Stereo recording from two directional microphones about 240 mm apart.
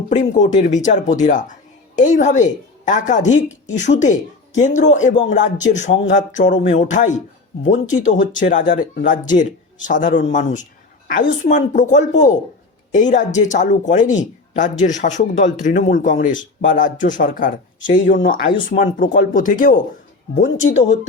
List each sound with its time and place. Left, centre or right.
0.1 s speech: left